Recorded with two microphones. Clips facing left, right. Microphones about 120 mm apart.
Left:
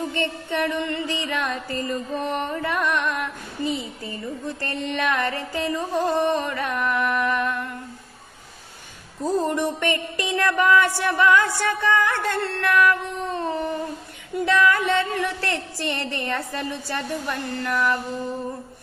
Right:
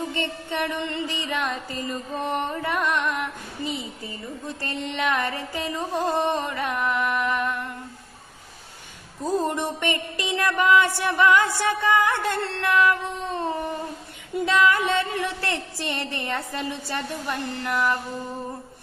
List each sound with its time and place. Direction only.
0.1 s speech: 20° right (ahead or behind)
9.4 s speech: 20° right (ahead or behind)